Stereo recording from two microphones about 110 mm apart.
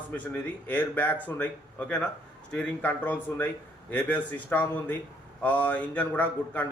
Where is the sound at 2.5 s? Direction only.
15° left (ahead or behind).